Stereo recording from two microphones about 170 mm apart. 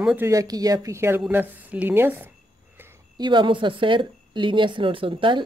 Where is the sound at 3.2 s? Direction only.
25° right (ahead or behind).